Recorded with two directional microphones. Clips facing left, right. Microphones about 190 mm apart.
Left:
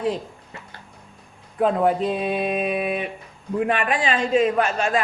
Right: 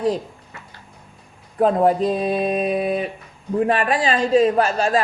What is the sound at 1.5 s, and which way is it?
A man's voice, 40° right (ahead or behind).